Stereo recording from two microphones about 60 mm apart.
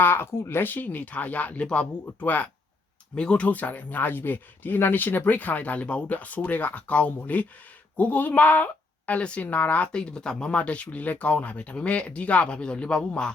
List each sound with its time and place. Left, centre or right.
0.0 s a woman's voice: left; by 13.3 s centre